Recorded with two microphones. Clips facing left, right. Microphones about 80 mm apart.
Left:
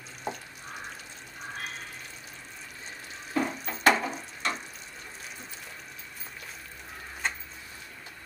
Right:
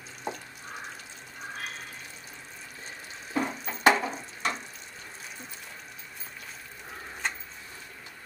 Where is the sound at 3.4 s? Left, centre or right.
Centre.